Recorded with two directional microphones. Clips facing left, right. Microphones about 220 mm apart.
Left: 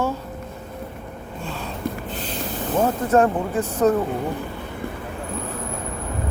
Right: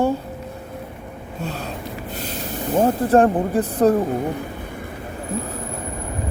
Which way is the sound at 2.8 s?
35° right (ahead or behind).